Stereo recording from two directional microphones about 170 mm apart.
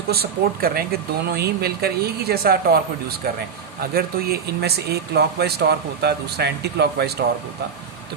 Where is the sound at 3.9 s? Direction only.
70° right (ahead or behind).